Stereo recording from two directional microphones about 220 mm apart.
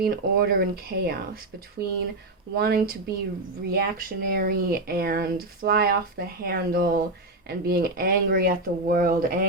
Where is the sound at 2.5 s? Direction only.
45° right (ahead or behind).